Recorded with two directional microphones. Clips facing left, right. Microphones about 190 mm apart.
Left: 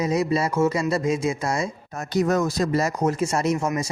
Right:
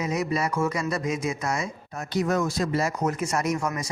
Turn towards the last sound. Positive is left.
turn(degrees=25)  # may be behind; listen again after turning